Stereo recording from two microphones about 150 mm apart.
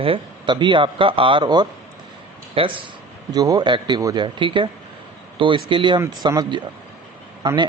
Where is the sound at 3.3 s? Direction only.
25° right (ahead or behind).